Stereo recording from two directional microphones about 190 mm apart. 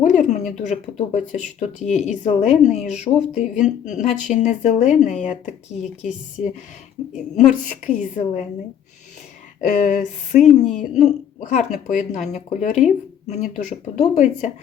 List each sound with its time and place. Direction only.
0.0 s a sound: 40° left (ahead or behind)
0.7 s speech: 40° left (ahead or behind)
9.6 s speech: 40° left (ahead or behind)